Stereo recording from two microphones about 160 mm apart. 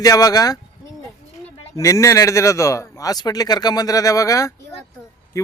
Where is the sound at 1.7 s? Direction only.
20° left (ahead or behind).